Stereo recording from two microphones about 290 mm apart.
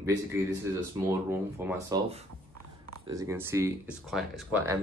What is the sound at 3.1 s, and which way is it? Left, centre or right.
Speech, centre.